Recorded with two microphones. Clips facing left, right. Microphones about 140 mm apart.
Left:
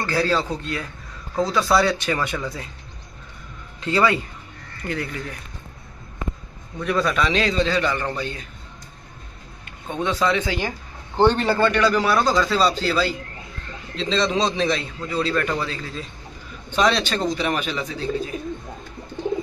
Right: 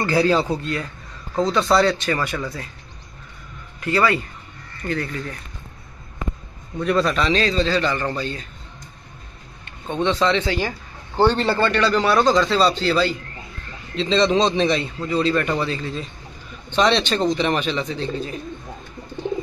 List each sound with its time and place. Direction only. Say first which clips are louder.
0.0 s speech: right 4 dB; 15° right (ahead or behind)
1.3 s a man's voice: right 1 dB; 5° left (ahead or behind)
3.8 s a man's voice: even; 20° left (ahead or behind)
6.8 s a man's voice: right 2 dB; centre (ahead or behind)
7.3 s a man's voice: right 1 dB; 15° left (ahead or behind)
9.7 s a man's voice: right 3 dB; 10° left (ahead or behind)